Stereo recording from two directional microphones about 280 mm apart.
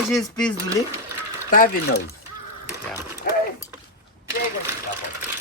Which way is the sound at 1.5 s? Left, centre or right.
Left.